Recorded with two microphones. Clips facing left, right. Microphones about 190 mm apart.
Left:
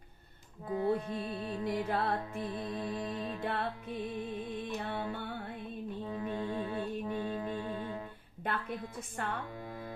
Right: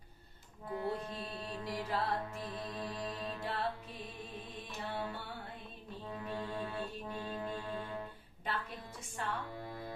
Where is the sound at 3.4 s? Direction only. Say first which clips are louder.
Left 3 dB; 55° left (ahead or behind).